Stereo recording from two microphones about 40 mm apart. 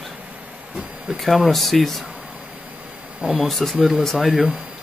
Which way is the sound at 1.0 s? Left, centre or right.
Centre.